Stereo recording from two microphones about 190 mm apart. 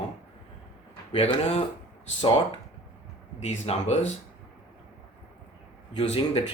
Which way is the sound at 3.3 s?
35° left (ahead or behind).